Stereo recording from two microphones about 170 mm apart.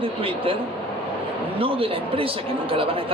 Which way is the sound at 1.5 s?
35° right (ahead or behind).